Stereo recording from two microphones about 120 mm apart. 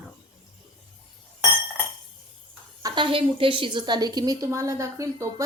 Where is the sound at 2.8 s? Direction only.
45° right (ahead or behind).